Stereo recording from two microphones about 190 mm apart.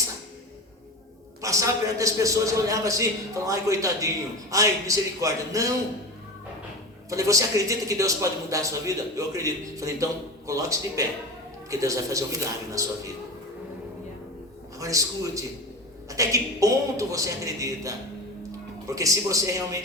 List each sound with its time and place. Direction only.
1.4 s speech: 15° right (ahead or behind)
7.1 s speech: 15° right (ahead or behind)
14.8 s speech: 15° right (ahead or behind)